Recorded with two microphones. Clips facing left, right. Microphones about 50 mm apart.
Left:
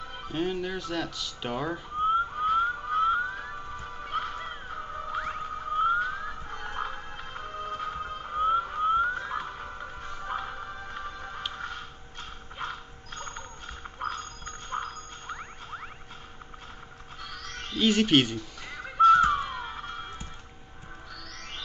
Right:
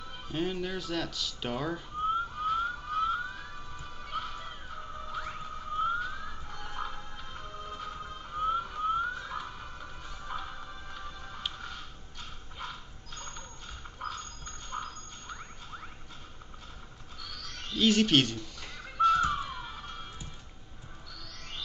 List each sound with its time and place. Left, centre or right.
0.3 s speech: centre
2.3 s music: left
11.5 s a sound: left
17.2 s music: left
17.7 s a sound: centre
18.9 s music: left